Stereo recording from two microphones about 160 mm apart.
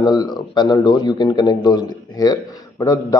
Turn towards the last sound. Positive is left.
turn(degrees=20)  # may be behind; listen again after turning